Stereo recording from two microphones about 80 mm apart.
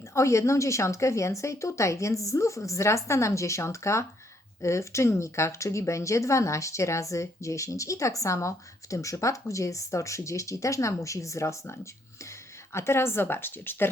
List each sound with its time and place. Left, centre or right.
0.1 s speech: left